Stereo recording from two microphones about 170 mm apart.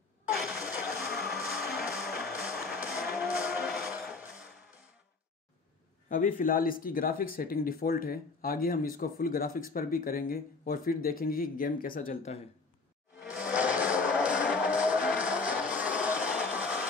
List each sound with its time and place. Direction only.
0.3 s a sound: centre (ahead or behind)
1.3 s music: centre (ahead or behind)
3.2 s music: 5° right (ahead or behind)
6.0 s speech: 55° left (ahead or behind)
13.2 s music: 5° right (ahead or behind)